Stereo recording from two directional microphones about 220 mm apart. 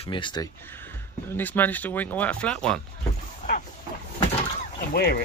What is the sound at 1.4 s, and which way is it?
Speech, 10° left (ahead or behind).